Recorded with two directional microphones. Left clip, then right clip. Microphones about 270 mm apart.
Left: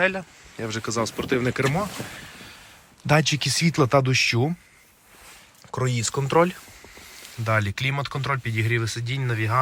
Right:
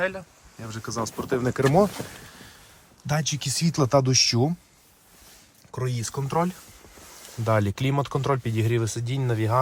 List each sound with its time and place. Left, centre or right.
0.0 s speech: centre; by 1.9 s right
3.1 s speech: centre
5.7 s speech: centre
7.4 s speech: centre